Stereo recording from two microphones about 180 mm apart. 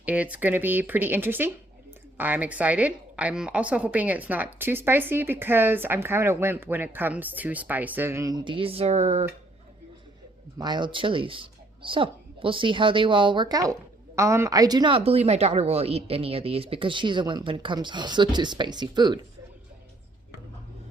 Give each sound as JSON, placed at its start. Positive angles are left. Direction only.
{"t": 0.0, "sound": "a woman's voice", "side_deg": -10}
{"t": 10.6, "sound": "speech", "side_deg": -25}